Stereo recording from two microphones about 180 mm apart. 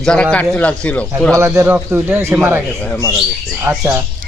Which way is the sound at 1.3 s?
15° right (ahead or behind).